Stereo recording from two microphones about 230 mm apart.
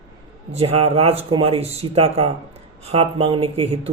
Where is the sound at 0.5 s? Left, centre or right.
Right.